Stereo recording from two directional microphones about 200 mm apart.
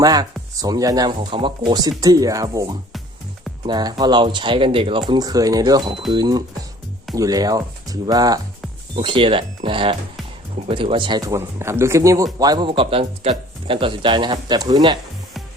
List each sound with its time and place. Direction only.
0.0 s speech: 20° right (ahead or behind)